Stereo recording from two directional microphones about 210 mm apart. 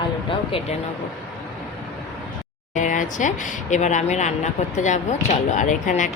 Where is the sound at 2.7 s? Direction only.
35° left (ahead or behind).